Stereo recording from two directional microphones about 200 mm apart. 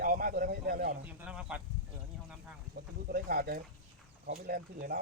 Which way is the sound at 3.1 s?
45° right (ahead or behind).